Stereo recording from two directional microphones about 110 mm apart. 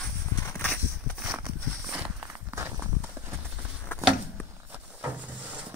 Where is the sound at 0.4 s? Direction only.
25° left (ahead or behind).